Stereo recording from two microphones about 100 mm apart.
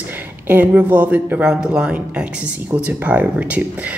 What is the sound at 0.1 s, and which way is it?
Speech, 20° right (ahead or behind).